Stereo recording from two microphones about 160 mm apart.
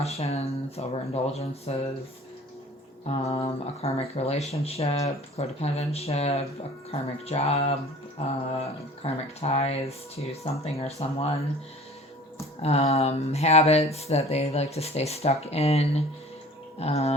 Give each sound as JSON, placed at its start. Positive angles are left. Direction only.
{"t": 0.0, "sound": "speech", "side_deg": 40}
{"t": 3.1, "sound": "speech", "side_deg": 40}
{"t": 12.6, "sound": "speech", "side_deg": 40}
{"t": 16.7, "sound": "a sound", "side_deg": 40}